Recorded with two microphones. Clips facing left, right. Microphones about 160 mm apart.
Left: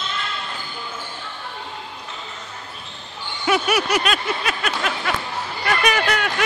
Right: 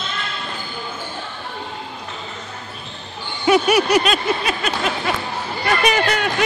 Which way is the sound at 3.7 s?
30° right (ahead or behind).